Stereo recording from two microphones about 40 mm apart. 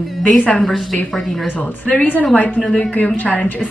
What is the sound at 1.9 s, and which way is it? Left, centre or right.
A woman's voice, left.